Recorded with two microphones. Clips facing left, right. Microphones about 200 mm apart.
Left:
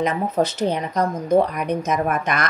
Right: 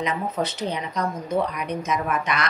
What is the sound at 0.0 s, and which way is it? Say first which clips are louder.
A woman's voice: left 5 dB; 45° left (ahead or behind).